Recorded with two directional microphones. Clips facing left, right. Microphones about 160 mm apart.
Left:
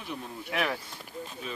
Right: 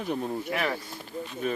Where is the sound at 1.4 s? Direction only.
50° right (ahead or behind).